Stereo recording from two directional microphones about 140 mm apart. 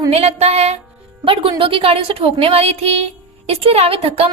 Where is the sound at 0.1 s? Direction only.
50° right (ahead or behind).